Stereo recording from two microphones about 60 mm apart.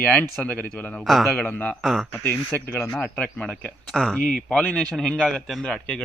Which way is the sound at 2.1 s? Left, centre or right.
Left.